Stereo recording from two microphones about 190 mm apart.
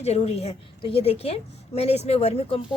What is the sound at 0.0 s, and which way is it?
A woman's voice, 35° left (ahead or behind).